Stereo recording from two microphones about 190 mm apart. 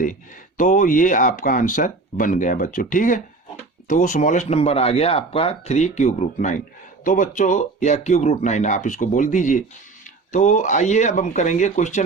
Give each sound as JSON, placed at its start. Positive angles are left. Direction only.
{"t": 0.0, "sound": "speech", "side_deg": 45}